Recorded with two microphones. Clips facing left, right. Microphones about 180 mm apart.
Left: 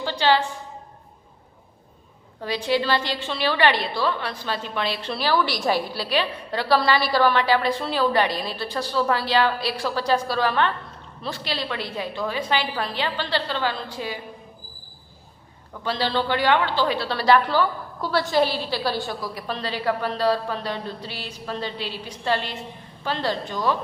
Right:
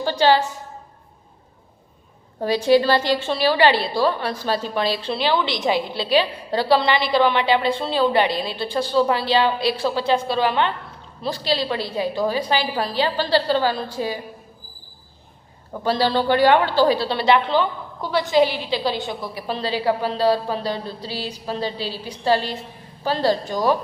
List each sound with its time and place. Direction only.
0.0 s a sound: 40° right (ahead or behind)
2.4 s a woman's voice: 40° right (ahead or behind)
15.7 s a woman's voice: 40° right (ahead or behind)